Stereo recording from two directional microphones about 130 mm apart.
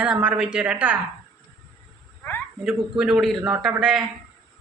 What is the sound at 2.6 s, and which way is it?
A man's voice, 5° right (ahead or behind).